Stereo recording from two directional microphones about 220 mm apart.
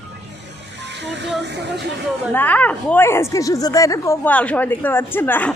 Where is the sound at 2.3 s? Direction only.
5° left (ahead or behind).